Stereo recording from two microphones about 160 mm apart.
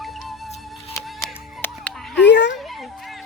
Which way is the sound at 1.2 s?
10° left (ahead or behind).